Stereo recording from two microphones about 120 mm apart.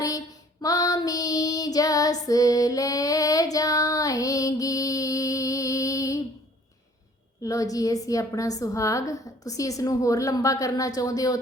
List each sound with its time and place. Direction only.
0.0 s child singing: 30° left (ahead or behind)
7.4 s a woman's voice: 30° left (ahead or behind)